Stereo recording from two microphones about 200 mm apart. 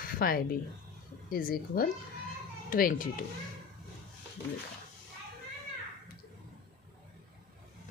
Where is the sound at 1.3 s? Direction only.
45° left (ahead or behind).